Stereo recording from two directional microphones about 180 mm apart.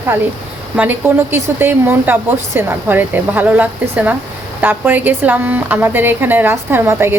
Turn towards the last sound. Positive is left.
turn(degrees=-10)  # may be behind; listen again after turning